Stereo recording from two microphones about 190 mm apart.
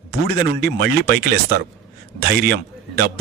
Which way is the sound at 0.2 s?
55° right (ahead or behind).